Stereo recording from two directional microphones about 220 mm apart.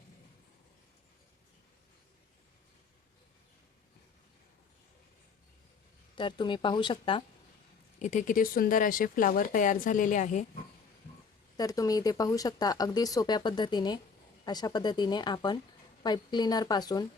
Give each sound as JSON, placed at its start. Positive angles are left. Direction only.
{"t": 6.1, "sound": "a woman's voice", "side_deg": 20}
{"t": 7.9, "sound": "speech", "side_deg": 35}
{"t": 11.5, "sound": "a woman's voice", "side_deg": 15}